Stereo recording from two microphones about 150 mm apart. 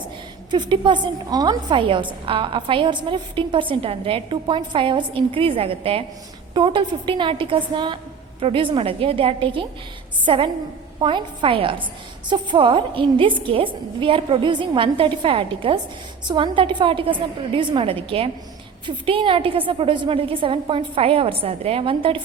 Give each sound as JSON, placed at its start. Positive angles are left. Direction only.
{"t": 0.5, "sound": "a woman's voice", "side_deg": -30}